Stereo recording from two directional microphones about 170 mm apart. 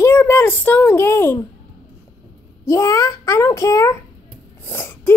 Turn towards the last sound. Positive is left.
turn(degrees=15)  # may be behind; listen again after turning